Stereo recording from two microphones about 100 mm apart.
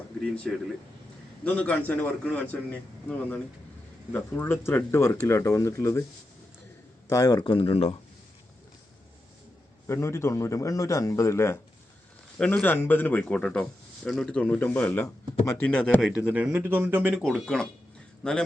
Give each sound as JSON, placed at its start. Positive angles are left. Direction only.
{"t": 1.5, "sound": "speech", "side_deg": 15}
{"t": 7.1, "sound": "speech", "side_deg": 35}
{"t": 7.5, "sound": "speech", "side_deg": 70}
{"t": 9.8, "sound": "speech", "side_deg": 25}
{"t": 12.6, "sound": "speech", "side_deg": 20}
{"t": 17.2, "sound": "a man's voice", "side_deg": 0}